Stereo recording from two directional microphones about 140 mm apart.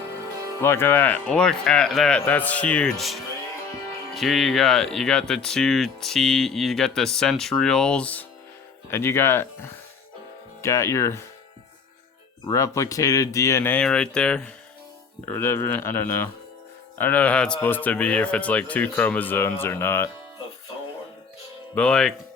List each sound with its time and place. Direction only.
0.6 s a man's voice: 15° left (ahead or behind)
12.5 s a man's voice: 20° left (ahead or behind)
21.8 s speech: 5° left (ahead or behind)